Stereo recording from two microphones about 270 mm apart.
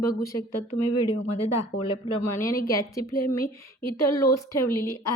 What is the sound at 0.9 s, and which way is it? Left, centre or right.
Speech, left.